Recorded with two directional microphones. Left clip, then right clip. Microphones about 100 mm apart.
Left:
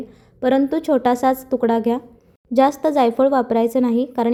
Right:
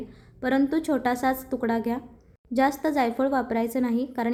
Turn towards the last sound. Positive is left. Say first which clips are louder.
# left 8 dB
turn(degrees=45)  # may be behind; listen again after turning